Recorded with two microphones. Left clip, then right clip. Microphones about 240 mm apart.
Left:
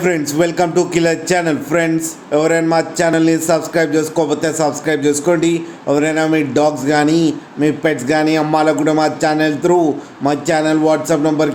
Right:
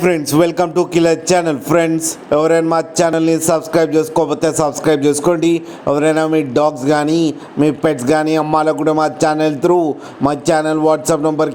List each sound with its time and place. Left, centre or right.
0.0 s a man's voice: right